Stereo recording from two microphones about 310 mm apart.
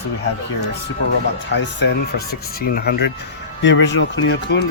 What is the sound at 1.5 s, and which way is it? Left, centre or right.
Speech, left.